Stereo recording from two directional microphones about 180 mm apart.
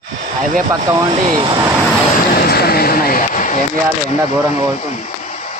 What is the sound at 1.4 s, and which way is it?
Speech, 20° right (ahead or behind).